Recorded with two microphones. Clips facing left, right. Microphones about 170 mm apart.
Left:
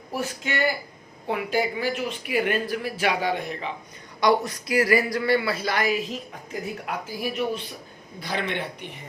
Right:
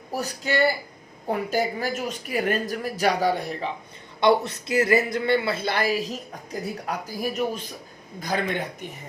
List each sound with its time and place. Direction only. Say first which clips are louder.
0.1 s speech: right 2 dB; 40° right (ahead or behind)
4.2 s a man's voice: right 1 dB; 25° right (ahead or behind); by 8.9 s 45° right (ahead or behind)